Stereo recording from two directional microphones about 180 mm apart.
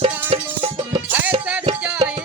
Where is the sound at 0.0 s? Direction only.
30° right (ahead or behind).